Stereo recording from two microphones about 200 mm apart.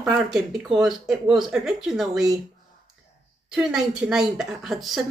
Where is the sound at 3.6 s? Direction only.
5° right (ahead or behind).